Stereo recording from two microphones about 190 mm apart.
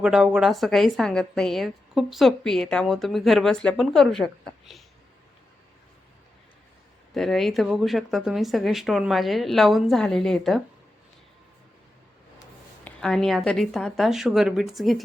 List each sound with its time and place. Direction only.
0.0 s a woman's voice: 5° right (ahead or behind)
7.1 s a woman's voice: centre (ahead or behind)
12.8 s a woman's voice: 5° left (ahead or behind)